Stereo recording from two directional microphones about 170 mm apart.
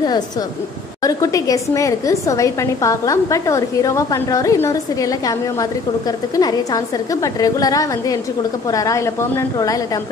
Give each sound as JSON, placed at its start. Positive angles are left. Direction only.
{"t": 1.0, "sound": "a woman's voice", "side_deg": 20}